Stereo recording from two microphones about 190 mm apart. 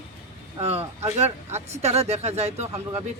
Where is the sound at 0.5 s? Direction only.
35° right (ahead or behind).